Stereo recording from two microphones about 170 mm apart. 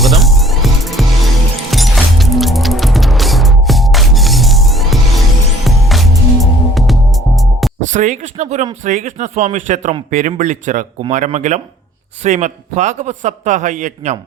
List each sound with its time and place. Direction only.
0.0 s music: centre (ahead or behind)
7.9 s speech: 45° right (ahead or behind)